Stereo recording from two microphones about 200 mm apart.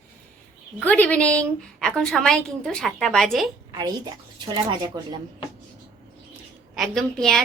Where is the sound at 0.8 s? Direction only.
5° left (ahead or behind).